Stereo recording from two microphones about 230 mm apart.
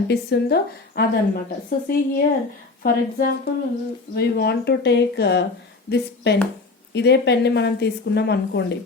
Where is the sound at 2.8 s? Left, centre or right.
Left.